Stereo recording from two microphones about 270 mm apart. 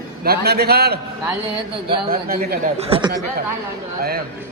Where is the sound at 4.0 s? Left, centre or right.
Right.